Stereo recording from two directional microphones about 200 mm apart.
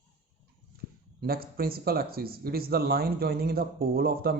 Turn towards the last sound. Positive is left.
turn(degrees=-50)  # may be behind; listen again after turning